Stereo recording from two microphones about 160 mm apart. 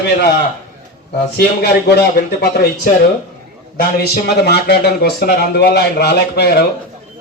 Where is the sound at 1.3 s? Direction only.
80° left.